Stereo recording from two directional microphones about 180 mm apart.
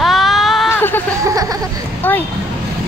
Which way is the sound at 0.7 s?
10° left (ahead or behind).